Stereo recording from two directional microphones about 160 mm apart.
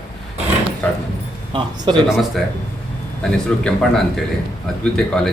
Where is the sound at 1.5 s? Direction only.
30° right (ahead or behind).